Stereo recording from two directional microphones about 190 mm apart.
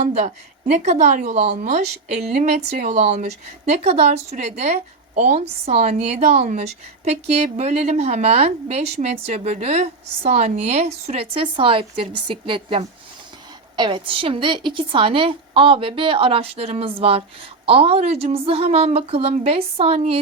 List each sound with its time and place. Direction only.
0.0 s a woman's voice: 35° right (ahead or behind)